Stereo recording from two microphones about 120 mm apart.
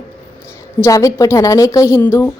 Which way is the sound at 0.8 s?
25° left (ahead or behind).